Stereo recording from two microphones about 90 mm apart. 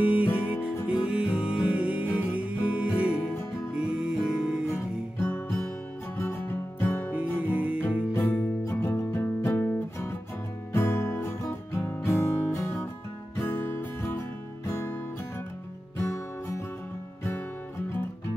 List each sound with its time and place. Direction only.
0.0 s music: 15° right (ahead or behind)
5.2 s music: 20° left (ahead or behind)
7.4 s music: 15° right (ahead or behind)
8.1 s music: 25° left (ahead or behind)
10.7 s guitar: 25° left (ahead or behind)
13.4 s music: 25° left (ahead or behind)
16.0 s music: 30° left (ahead or behind)